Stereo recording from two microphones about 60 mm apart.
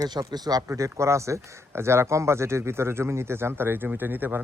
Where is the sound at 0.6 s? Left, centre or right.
Right.